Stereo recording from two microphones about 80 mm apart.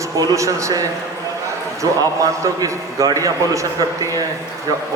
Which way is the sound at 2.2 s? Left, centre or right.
Right.